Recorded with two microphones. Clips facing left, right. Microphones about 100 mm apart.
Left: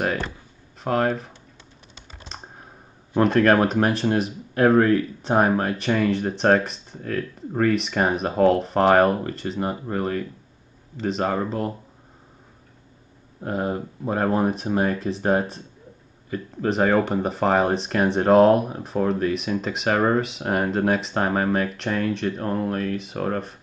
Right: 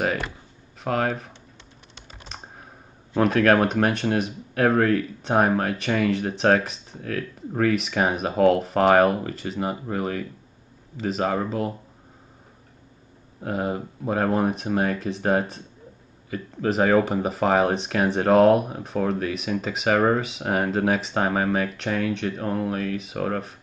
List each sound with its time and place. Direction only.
0.0 s a sound: centre (ahead or behind)
0.8 s speech: centre (ahead or behind)
2.2 s computer keyboard: centre (ahead or behind)
3.2 s speech: centre (ahead or behind)
13.4 s speech: centre (ahead or behind)